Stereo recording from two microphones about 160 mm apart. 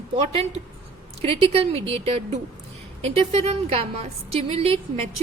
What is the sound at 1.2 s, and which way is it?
A woman's voice, 35° right (ahead or behind).